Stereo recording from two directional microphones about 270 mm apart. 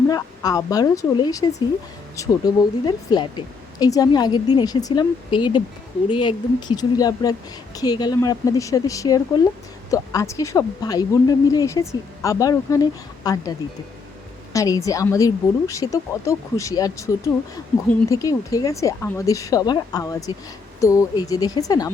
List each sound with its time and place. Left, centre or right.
0.1 s speech: centre
14.5 s speech: centre